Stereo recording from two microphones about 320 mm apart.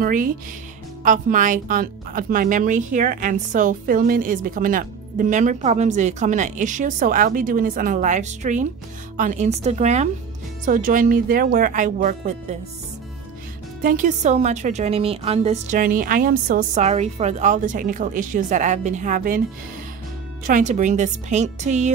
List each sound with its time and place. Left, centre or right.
0.0 s speech: right
13.8 s speech: right
20.4 s speech: right